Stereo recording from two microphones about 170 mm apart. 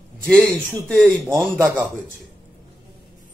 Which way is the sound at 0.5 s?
5° left (ahead or behind).